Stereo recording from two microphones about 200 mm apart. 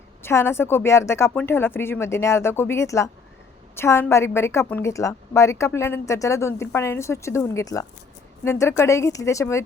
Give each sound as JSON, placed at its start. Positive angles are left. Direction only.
{"t": 0.2, "sound": "a woman's voice", "side_deg": 10}